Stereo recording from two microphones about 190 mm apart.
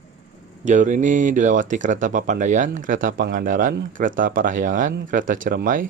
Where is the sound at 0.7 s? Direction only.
40° right (ahead or behind).